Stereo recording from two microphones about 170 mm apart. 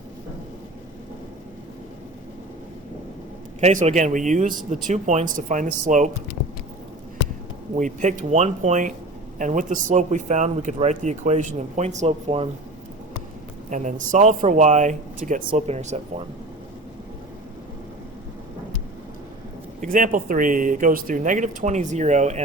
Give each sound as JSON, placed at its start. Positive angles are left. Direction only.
{"t": 3.6, "sound": "speech", "side_deg": -45}
{"t": 7.8, "sound": "speech", "side_deg": -50}
{"t": 13.7, "sound": "speech", "side_deg": -45}
{"t": 15.6, "sound": "speech", "side_deg": -40}
{"t": 19.9, "sound": "speech", "side_deg": -50}